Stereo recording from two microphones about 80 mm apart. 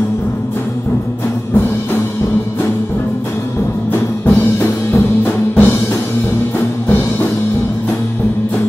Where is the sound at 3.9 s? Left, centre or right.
Left.